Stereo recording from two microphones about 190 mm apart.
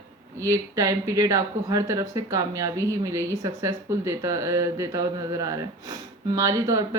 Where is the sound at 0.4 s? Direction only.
15° right (ahead or behind).